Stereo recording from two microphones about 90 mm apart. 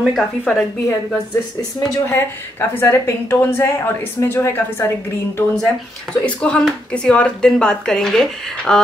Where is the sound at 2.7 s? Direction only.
25° left (ahead or behind).